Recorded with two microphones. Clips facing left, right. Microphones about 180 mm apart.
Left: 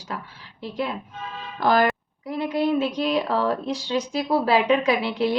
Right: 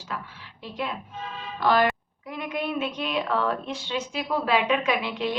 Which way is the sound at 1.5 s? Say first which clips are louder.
Left 2 dB; 45° left (ahead or behind).